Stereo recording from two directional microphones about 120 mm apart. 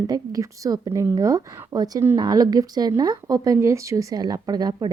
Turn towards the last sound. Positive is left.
turn(degrees=-35)  # may be behind; listen again after turning